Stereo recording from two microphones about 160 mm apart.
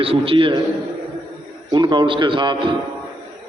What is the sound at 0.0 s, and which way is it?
Speech, 35° right (ahead or behind).